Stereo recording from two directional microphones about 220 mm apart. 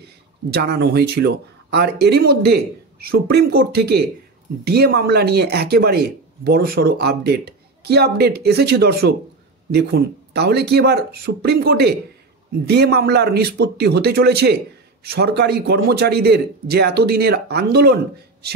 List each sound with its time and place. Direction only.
0.0 s speech: 50° right (ahead or behind)